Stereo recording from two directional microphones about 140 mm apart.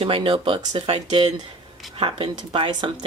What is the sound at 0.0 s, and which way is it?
Speech, 40° right (ahead or behind).